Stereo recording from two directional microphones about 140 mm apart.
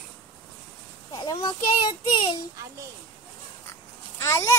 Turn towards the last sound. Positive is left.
turn(degrees=20)  # may be behind; listen again after turning